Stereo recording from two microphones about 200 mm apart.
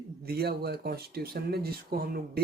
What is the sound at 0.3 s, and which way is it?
Speech, 50° right (ahead or behind).